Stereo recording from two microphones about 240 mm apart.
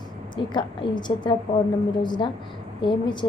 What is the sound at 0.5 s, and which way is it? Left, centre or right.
A woman's voice, centre.